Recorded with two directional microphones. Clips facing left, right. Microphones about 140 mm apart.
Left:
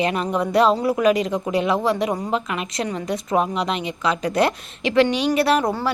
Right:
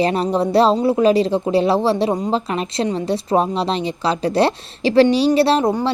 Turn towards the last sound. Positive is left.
turn(degrees=-25)  # may be behind; listen again after turning